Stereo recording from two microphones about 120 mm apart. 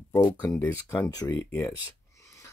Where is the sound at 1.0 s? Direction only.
35° left (ahead or behind).